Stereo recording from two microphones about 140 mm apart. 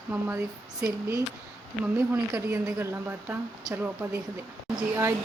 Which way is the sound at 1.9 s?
15° right (ahead or behind).